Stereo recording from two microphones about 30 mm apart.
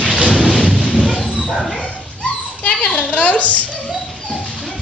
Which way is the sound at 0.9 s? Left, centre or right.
Left.